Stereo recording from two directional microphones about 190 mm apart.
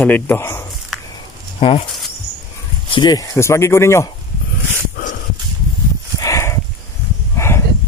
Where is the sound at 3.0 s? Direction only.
20° left (ahead or behind).